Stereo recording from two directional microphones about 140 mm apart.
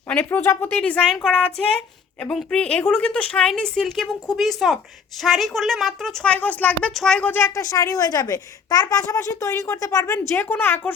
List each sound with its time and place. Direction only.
0.1 s a woman's voice: 15° left (ahead or behind)